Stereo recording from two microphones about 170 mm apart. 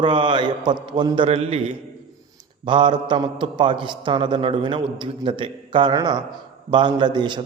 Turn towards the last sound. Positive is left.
turn(degrees=-25)  # may be behind; listen again after turning